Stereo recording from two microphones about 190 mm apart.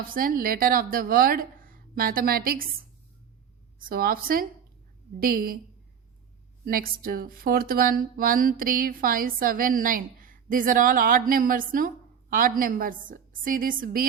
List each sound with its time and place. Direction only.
0.1 s speech: 50° right (ahead or behind)
3.8 s speech: 50° right (ahead or behind)
6.7 s speech: 50° right (ahead or behind)